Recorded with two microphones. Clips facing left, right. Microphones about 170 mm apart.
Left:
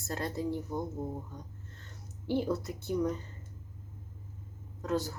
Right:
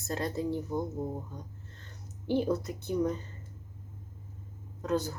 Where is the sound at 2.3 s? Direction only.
20° right (ahead or behind).